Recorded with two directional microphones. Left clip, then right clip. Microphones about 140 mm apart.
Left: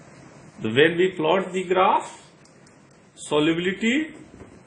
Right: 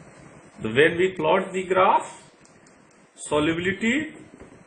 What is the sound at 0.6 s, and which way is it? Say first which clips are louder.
Speech: left 1 dB; 60° left (ahead or behind).